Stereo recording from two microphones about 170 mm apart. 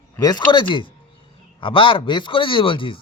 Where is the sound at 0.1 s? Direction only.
25° left (ahead or behind).